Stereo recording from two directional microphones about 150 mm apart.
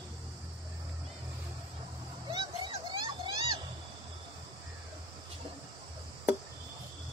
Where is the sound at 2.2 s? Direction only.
35° right (ahead or behind).